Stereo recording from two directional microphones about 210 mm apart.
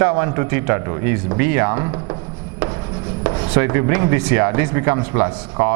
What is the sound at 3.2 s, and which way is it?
A man's voice, 20° right (ahead or behind).